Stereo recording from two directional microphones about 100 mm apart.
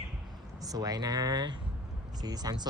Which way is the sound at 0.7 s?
40° right (ahead or behind).